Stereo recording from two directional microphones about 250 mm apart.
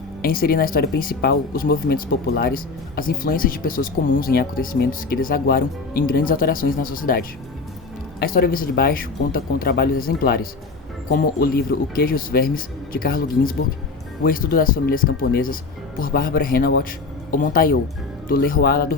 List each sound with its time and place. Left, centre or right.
0.2 s speech: left